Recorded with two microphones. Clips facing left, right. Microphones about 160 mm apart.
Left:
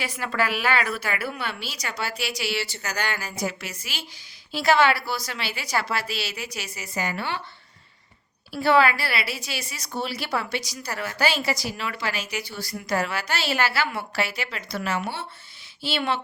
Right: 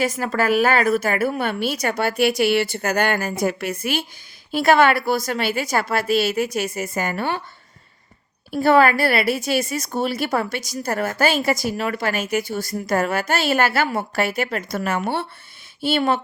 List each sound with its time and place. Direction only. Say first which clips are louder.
0.0 s a woman's voice: right 6 dB; 45° right (ahead or behind)
8.5 s a woman's voice: right 5 dB; 50° right (ahead or behind)